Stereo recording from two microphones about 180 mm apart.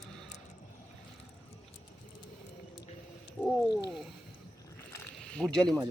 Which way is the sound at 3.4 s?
Centre (ahead or behind).